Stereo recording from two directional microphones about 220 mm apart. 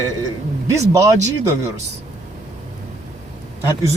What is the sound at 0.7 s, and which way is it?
Speech, 15° right (ahead or behind).